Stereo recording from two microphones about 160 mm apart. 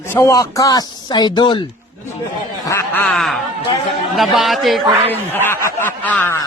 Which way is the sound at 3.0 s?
5° left (ahead or behind).